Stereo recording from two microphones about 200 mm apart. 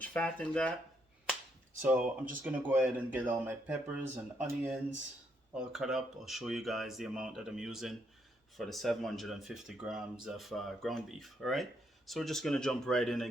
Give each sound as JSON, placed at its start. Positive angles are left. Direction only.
{"t": 0.0, "sound": "speech", "side_deg": 5}
{"t": 1.8, "sound": "speech", "side_deg": -10}